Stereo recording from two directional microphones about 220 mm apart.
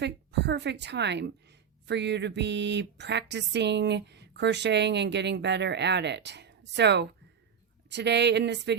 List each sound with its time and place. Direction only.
0.0 s a woman's voice: 50° right (ahead or behind)